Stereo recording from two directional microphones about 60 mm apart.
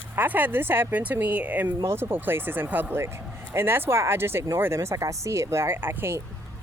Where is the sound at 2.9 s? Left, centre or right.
Right.